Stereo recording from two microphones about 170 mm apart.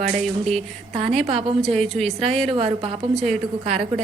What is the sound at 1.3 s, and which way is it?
Speech, 40° right (ahead or behind).